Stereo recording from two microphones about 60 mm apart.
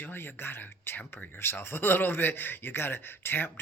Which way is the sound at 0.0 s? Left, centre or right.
Left.